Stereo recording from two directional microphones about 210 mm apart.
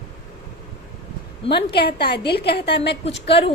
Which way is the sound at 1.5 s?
50° left (ahead or behind).